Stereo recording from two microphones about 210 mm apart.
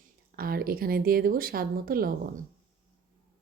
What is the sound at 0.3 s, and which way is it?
A woman's voice, 45° right (ahead or behind).